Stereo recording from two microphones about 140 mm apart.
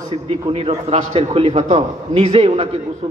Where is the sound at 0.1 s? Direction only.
45° right (ahead or behind).